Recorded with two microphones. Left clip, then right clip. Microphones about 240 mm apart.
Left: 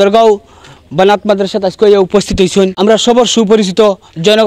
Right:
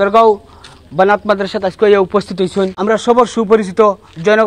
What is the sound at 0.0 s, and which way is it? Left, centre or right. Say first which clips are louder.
A man's voice: left 2 dB; left.